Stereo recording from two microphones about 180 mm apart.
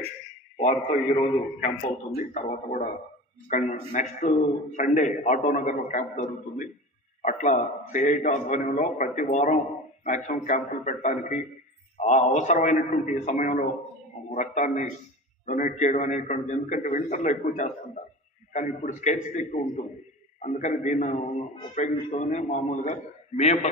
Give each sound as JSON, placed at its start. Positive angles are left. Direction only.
{"t": 0.6, "sound": "a man's voice", "side_deg": 40}